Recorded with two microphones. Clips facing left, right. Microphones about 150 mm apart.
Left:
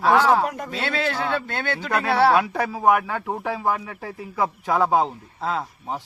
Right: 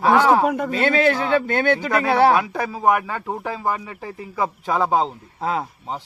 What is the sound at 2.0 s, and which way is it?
Speech, 15° right (ahead or behind).